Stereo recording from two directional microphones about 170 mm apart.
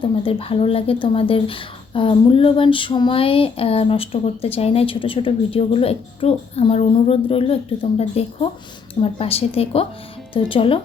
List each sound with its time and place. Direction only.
0.0 s speech: 30° left (ahead or behind)